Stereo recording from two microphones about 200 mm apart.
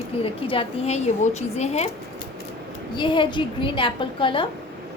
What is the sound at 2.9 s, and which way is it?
A woman's voice, 25° left (ahead or behind).